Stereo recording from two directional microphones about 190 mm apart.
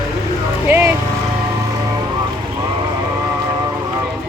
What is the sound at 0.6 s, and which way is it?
Vehicle, 10° right (ahead or behind).